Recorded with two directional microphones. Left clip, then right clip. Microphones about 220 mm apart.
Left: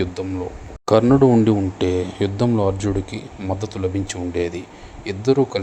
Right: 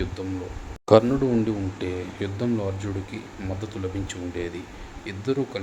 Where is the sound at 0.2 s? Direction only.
30° left (ahead or behind).